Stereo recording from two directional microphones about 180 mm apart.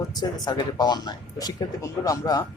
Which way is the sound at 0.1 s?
20° left (ahead or behind).